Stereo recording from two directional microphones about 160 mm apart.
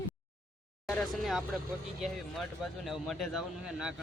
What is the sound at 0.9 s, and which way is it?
Speech, 5° left (ahead or behind).